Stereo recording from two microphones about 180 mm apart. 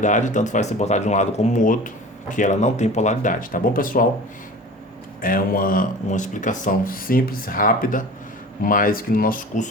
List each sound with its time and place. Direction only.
0.0 s speech: 45° left (ahead or behind)
5.2 s speech: 50° left (ahead or behind)